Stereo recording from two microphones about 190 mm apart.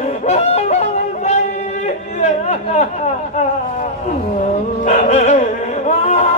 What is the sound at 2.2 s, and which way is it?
Chatter, 40° left (ahead or behind).